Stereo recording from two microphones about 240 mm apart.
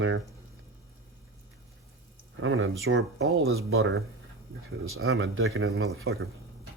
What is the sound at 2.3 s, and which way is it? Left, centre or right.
Speech, right.